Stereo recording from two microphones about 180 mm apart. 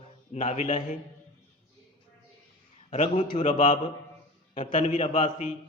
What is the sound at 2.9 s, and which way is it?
Speech, 40° left (ahead or behind).